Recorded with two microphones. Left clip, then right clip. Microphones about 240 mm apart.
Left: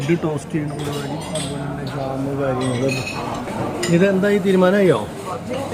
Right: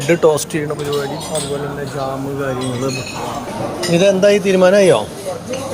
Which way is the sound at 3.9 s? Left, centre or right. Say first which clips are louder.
Right 6 dB; centre.